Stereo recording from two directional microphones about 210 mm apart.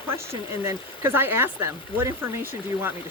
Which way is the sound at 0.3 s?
15° right (ahead or behind).